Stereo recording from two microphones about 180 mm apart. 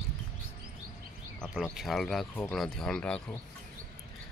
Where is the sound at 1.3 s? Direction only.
Centre (ahead or behind).